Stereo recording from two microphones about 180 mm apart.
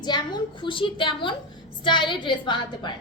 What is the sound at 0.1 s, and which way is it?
A woman's voice, 25° left (ahead or behind).